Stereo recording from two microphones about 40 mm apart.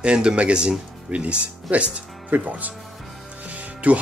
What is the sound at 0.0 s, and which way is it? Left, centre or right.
Speech, right.